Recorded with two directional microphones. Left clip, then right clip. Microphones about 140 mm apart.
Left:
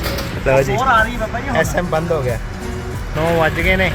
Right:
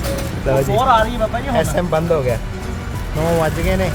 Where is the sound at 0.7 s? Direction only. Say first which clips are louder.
Right 5 dB; 85° right.